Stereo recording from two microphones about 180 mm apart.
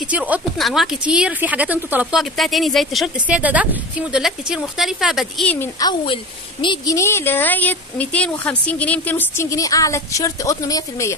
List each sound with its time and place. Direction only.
0.1 s speech: 10° right (ahead or behind)
5.5 s a woman's voice: 15° left (ahead or behind)